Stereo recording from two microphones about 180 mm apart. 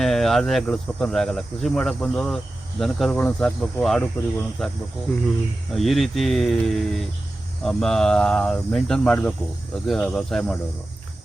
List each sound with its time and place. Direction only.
0.0 s speech: centre (ahead or behind)
5.7 s speech: centre (ahead or behind)